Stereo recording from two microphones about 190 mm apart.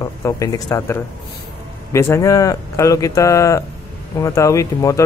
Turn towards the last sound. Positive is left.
turn(degrees=15)  # may be behind; listen again after turning